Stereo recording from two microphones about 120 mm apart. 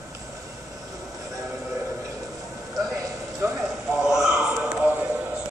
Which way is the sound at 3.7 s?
5° right (ahead or behind).